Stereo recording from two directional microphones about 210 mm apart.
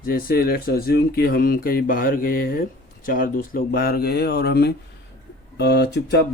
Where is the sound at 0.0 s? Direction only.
45° left (ahead or behind).